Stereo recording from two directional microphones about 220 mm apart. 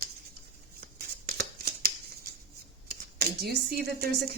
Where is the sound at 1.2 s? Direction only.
45° right (ahead or behind).